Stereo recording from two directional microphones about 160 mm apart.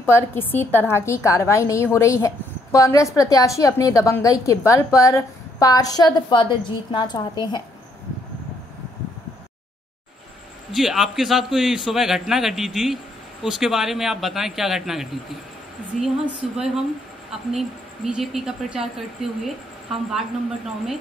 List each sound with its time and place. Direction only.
0.0 s a woman's voice: 15° left (ahead or behind)
10.7 s a man's voice: centre (ahead or behind)